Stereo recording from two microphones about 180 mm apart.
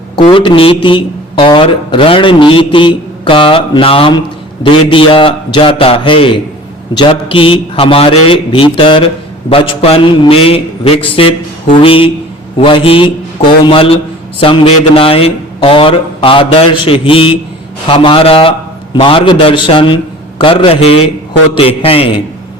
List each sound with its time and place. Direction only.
0.2 s a man's voice: 30° left (ahead or behind)